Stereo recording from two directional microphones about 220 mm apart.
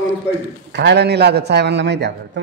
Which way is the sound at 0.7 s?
50° right (ahead or behind).